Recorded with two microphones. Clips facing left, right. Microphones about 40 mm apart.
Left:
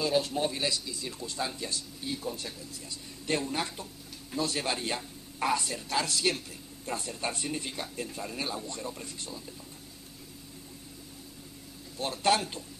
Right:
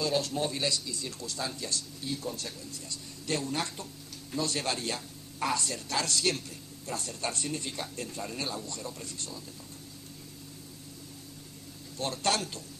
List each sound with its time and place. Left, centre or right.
0.0 s speech: centre
1.2 s speech: left
8.6 s speech: left
12.0 s speech: centre